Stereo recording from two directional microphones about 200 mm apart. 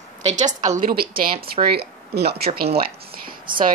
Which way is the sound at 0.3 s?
35° right (ahead or behind).